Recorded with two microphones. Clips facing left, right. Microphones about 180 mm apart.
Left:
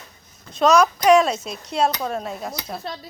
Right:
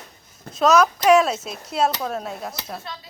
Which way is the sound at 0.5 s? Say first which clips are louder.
Left 1 dB; 5° right (ahead or behind).